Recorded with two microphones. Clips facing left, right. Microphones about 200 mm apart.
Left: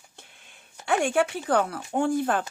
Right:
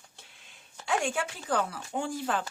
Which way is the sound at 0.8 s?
65° left (ahead or behind).